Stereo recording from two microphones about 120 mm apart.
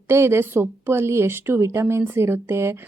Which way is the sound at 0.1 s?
20° right (ahead or behind).